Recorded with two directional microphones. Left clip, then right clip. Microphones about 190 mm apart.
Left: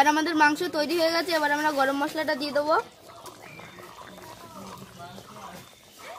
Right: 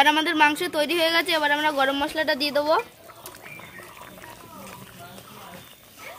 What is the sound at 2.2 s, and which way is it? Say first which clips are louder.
Speech: right 3 dB; 20° right (ahead or behind).